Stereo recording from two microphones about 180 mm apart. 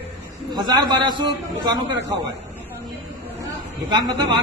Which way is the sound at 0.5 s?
20° right (ahead or behind).